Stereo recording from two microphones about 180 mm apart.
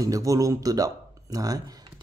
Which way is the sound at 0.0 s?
20° right (ahead or behind).